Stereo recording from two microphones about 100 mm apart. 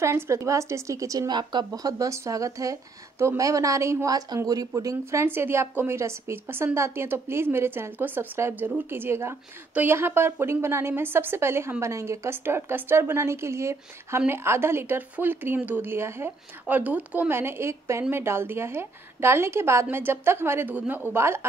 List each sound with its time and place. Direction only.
0.0 s a woman's voice: 30° right (ahead or behind)